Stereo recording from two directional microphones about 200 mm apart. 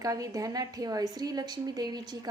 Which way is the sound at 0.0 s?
15° right (ahead or behind).